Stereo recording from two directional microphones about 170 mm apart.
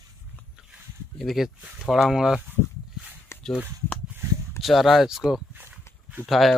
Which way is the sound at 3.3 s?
15° left (ahead or behind).